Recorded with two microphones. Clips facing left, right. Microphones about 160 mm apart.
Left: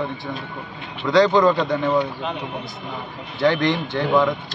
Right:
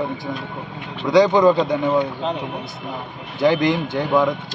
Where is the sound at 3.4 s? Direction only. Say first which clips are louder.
Right 2 dB; 10° right (ahead or behind).